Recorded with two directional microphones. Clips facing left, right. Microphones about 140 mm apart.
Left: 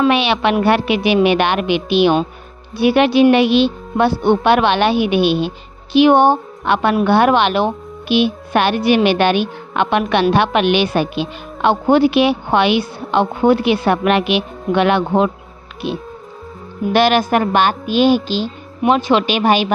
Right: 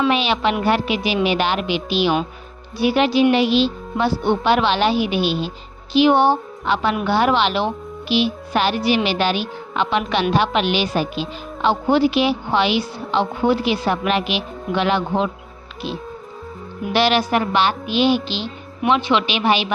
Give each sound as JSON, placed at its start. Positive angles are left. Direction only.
{"t": 0.1, "sound": "a woman's voice", "side_deg": 70}